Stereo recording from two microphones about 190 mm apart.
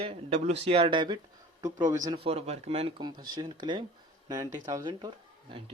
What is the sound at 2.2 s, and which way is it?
A man's voice, 30° right (ahead or behind).